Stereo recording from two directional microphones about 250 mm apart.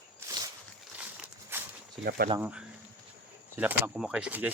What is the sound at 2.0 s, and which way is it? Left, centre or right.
Speech, right.